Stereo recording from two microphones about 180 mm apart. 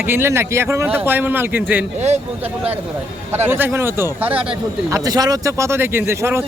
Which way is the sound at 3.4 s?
10° right (ahead or behind).